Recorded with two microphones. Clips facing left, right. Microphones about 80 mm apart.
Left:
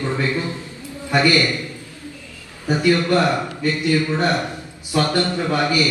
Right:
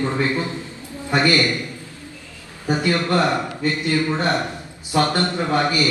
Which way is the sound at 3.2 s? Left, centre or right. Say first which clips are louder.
Left 1 dB; right.